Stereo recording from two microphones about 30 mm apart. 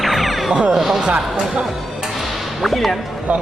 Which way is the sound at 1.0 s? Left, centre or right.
Right.